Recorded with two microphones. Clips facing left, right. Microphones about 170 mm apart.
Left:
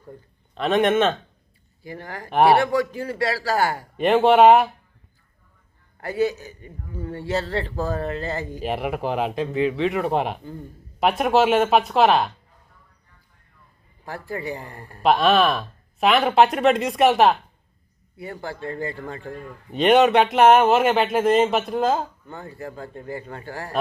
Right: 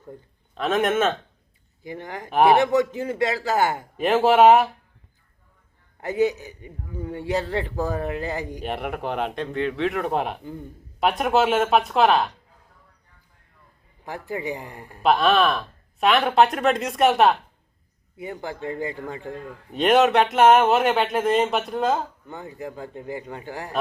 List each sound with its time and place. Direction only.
0.5 s speech: centre (ahead or behind)
1.8 s a man's voice: 20° right (ahead or behind)
2.3 s speech: centre (ahead or behind)
2.6 s a man's voice: 20° right (ahead or behind)
3.9 s speech: centre (ahead or behind)
6.0 s a man's voice: 20° right (ahead or behind)
8.6 s speech: centre (ahead or behind)
14.0 s a man's voice: 15° right (ahead or behind)
15.0 s speech: centre (ahead or behind)
18.2 s a man's voice: 15° right (ahead or behind)
19.7 s speech: centre (ahead or behind)
22.3 s a man's voice: 15° right (ahead or behind)